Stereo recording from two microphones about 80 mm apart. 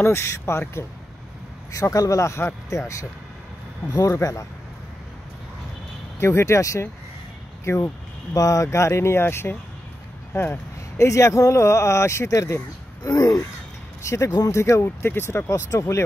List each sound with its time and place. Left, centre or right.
0.0 s speech: left
6.1 s speech: left
8.4 s speech: left
13.0 s caw: left
14.0 s speech: left